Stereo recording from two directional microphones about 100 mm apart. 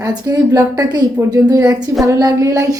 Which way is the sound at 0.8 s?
45° right (ahead or behind).